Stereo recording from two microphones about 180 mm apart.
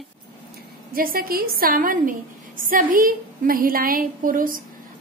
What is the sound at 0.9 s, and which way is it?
A woman's voice, 55° right (ahead or behind).